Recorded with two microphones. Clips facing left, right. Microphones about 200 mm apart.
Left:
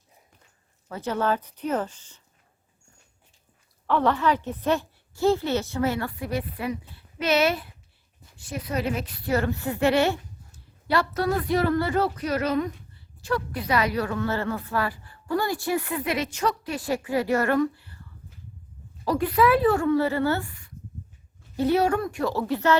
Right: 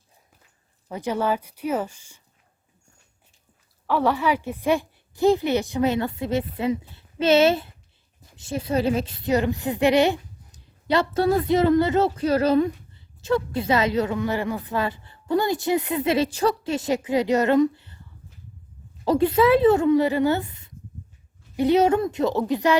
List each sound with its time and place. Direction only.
0.9 s a woman's voice: 15° right (ahead or behind)
3.8 s a woman's voice: 10° right (ahead or behind)
19.0 s a woman's voice: 25° right (ahead or behind)